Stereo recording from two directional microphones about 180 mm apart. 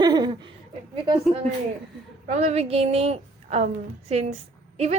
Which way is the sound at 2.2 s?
40° right (ahead or behind).